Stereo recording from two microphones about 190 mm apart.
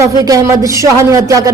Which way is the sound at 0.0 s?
15° right (ahead or behind).